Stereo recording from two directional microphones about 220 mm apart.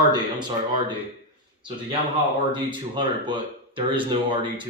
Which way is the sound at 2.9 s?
20° right (ahead or behind).